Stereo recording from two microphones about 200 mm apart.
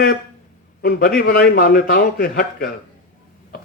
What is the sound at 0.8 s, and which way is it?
A man's voice, 50° left (ahead or behind).